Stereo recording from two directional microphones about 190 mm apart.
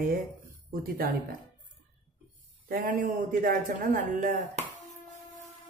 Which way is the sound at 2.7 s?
45° right (ahead or behind).